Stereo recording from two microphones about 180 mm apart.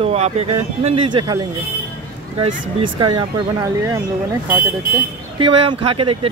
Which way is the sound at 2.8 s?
25° right (ahead or behind).